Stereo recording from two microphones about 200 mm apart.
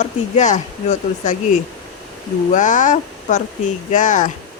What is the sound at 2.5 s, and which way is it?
Speech, 40° left (ahead or behind).